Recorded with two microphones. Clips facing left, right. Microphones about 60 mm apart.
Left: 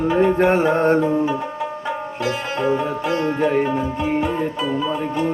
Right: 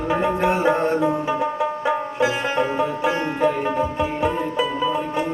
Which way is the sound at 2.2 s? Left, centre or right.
Centre.